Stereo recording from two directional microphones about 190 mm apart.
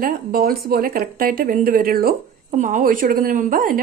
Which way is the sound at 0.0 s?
50° right (ahead or behind).